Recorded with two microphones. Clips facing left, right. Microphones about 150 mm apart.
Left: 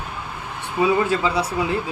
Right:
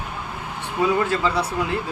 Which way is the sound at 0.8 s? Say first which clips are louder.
Left 2 dB; 5° left (ahead or behind).